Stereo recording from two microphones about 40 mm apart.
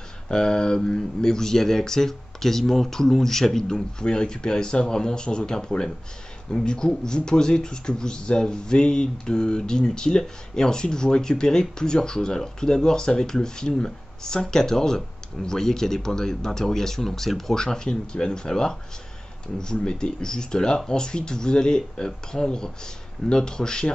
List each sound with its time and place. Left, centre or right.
0.3 s speech: centre
17.6 s speech: centre